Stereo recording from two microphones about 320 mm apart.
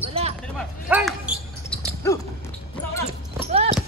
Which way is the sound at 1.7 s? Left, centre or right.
Centre.